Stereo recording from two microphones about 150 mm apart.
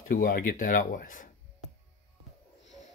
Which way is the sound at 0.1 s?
80° left.